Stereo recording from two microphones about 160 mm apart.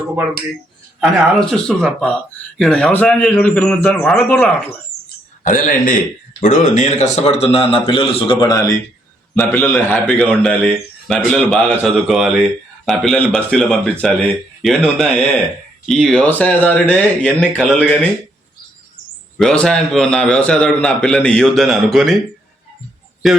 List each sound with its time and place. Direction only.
1.4 s a man's voice: 5° left (ahead or behind)
5.4 s a man's voice: 55° left (ahead or behind); by 17.8 s 5° left (ahead or behind)
19.4 s a man's voice: 5° left (ahead or behind)